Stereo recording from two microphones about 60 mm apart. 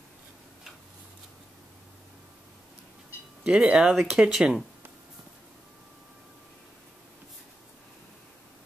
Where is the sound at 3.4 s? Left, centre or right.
Centre.